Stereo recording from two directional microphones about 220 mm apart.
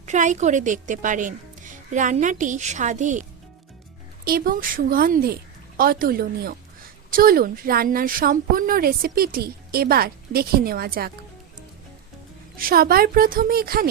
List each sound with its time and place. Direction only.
0.0 s a woman's voice: 35° right (ahead or behind)
4.3 s a woman's voice: 40° right (ahead or behind)
12.5 s a woman's voice: 40° right (ahead or behind)